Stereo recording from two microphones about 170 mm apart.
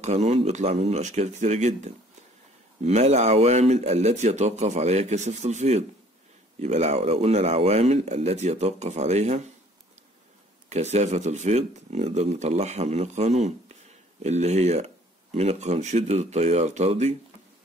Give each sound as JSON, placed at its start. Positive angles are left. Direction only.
{"t": 0.0, "sound": "speech", "side_deg": -40}
{"t": 10.7, "sound": "speech", "side_deg": -40}